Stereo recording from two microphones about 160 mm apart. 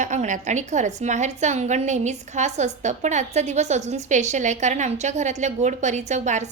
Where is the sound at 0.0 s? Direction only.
50° right (ahead or behind).